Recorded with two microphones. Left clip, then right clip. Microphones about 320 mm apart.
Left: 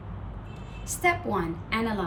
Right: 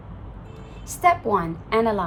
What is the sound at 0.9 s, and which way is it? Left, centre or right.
A woman's voice, centre.